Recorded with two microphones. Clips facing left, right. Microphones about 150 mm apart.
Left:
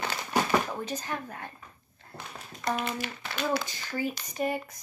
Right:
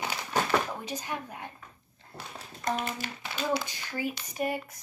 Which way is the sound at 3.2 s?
15° right (ahead or behind).